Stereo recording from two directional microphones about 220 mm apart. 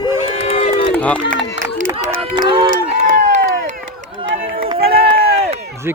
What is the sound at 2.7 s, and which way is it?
Run, 40° right (ahead or behind).